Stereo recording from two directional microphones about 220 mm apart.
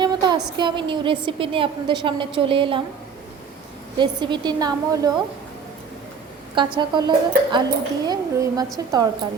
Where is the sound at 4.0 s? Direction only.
20° right (ahead or behind).